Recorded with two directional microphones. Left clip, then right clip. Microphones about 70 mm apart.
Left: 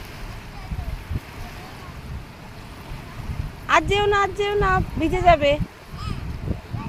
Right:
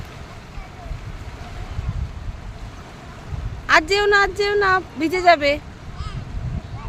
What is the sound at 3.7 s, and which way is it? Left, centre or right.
Speech, right.